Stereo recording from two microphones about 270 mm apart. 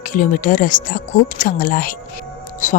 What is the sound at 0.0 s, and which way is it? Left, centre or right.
Speech, left.